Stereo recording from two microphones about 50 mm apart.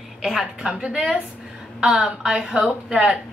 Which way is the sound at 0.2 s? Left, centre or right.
Centre.